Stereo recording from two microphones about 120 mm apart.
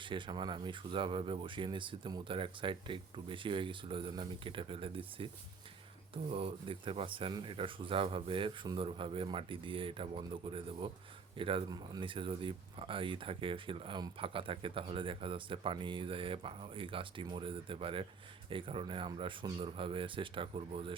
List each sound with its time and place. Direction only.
0.0 s speech: 45° right (ahead or behind)
6.3 s speech: 50° right (ahead or behind)